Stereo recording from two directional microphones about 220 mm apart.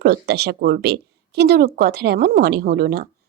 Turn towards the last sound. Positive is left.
turn(degrees=-45)  # may be behind; listen again after turning